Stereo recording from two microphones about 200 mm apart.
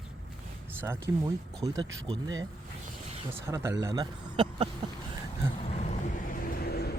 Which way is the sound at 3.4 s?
15° right (ahead or behind).